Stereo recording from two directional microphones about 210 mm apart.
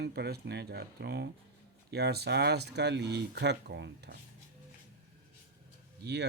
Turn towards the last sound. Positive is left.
turn(degrees=-55)  # may be behind; listen again after turning